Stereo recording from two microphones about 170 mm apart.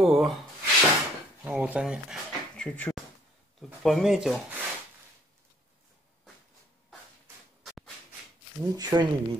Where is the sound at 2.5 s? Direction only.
5° left (ahead or behind).